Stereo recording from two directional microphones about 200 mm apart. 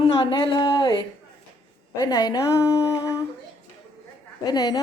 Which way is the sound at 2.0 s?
20° left (ahead or behind).